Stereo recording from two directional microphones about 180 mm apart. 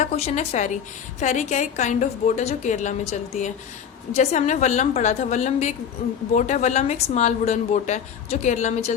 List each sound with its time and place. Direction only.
0.0 s a woman's voice: 35° left (ahead or behind)